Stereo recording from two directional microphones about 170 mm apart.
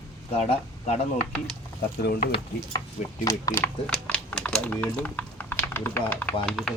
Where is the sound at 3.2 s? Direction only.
15° left (ahead or behind).